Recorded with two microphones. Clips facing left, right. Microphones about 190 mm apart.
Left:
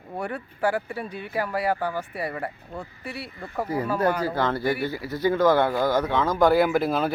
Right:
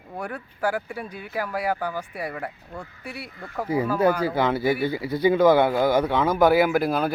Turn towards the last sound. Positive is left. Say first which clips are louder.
# right 1 dB
turn(degrees=0)  # may be behind; listen again after turning